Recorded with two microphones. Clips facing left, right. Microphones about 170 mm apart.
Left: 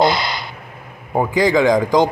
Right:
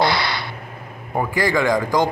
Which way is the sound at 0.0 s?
20° left (ahead or behind).